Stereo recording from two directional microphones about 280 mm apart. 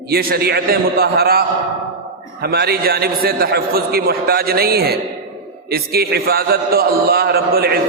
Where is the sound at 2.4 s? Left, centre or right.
Right.